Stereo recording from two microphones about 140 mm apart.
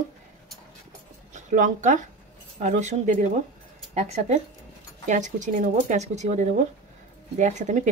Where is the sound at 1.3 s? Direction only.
60° right (ahead or behind).